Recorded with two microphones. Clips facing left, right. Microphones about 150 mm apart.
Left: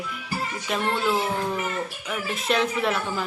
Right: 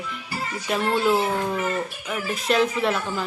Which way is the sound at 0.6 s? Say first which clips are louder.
Right 4 dB; 5° right (ahead or behind).